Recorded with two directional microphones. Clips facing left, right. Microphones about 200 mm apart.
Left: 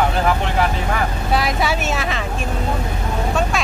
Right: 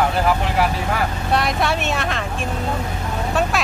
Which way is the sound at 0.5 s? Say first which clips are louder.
Even; centre (ahead or behind).